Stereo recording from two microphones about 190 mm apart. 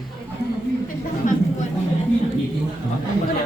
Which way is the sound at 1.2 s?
45° left (ahead or behind).